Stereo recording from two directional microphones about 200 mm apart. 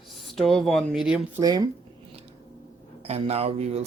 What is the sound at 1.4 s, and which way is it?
Speech, 20° right (ahead or behind).